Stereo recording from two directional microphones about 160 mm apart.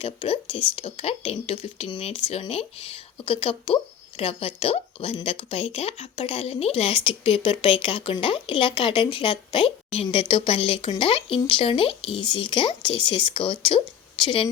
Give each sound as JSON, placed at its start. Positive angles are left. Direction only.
{"t": 0.0, "sound": "speech", "side_deg": 35}